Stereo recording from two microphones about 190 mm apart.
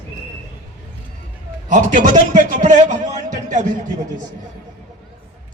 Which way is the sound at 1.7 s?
40° right (ahead or behind).